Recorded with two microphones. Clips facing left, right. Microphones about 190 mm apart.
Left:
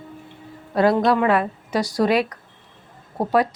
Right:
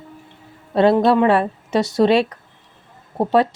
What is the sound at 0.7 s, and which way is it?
Speech, 25° right (ahead or behind).